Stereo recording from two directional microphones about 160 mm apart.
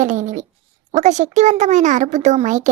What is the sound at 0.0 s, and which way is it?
A child's voice, 50° right (ahead or behind).